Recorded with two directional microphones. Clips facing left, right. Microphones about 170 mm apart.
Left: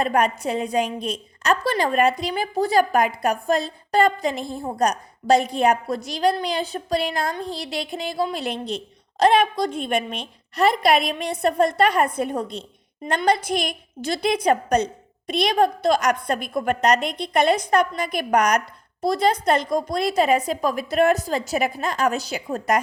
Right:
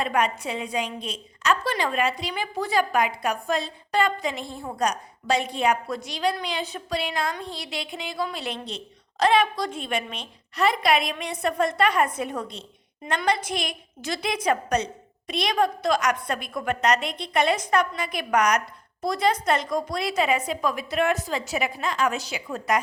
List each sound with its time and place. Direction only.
0.0 s a woman's voice: 40° left (ahead or behind)
10.6 s a woman's voice: 35° left (ahead or behind)